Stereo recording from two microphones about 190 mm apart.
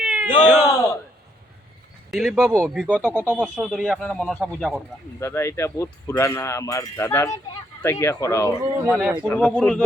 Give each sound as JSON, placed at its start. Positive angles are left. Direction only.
{"t": 0.0, "sound": "cat", "side_deg": -10}
{"t": 0.6, "sound": "speech", "side_deg": 20}
{"t": 2.0, "sound": "speech", "side_deg": 0}
{"t": 3.2, "sound": "speech", "side_deg": -5}
{"t": 5.2, "sound": "speech", "side_deg": 15}
{"t": 8.9, "sound": "speech", "side_deg": -5}
{"t": 9.3, "sound": "speech", "side_deg": 5}